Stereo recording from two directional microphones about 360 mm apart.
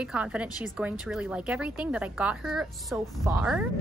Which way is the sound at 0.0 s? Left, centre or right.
Centre.